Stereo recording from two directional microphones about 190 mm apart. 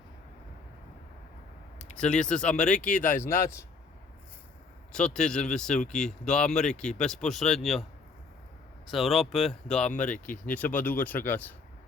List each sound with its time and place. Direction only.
1.8 s speech: 5° left (ahead or behind)
4.9 s speech: 5° left (ahead or behind)
8.9 s speech: centre (ahead or behind)